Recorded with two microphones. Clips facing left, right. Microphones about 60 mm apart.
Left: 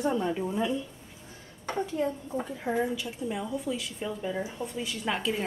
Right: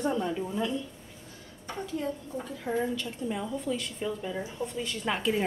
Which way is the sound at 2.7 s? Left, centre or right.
Centre.